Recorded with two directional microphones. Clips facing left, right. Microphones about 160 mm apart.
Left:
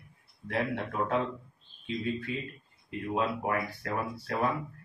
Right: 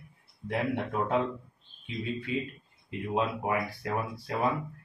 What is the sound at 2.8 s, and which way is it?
A man's voice, 20° right (ahead or behind).